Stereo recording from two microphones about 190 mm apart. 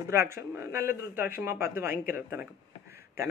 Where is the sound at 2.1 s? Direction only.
10° right (ahead or behind).